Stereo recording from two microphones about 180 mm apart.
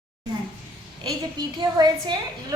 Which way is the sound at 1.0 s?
25° right (ahead or behind).